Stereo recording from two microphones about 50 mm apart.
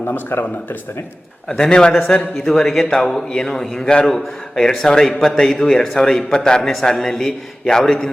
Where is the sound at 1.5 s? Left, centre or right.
Centre.